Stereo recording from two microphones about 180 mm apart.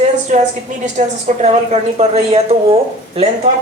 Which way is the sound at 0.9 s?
35° right (ahead or behind).